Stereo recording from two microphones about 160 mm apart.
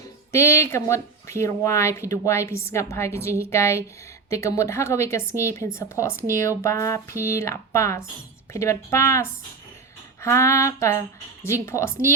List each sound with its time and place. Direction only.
0.3 s speech: 15° left (ahead or behind)